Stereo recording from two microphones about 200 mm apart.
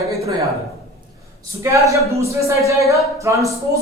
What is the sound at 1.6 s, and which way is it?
Speech, 15° right (ahead or behind).